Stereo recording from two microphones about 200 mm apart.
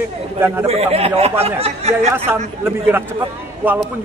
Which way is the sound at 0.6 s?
30° right (ahead or behind).